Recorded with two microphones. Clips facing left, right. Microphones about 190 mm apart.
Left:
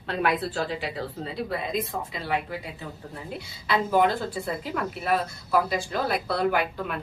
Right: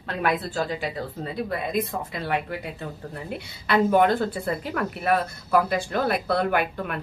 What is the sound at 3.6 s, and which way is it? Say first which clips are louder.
A woman's voice: right 3 dB; 60° right (ahead or behind).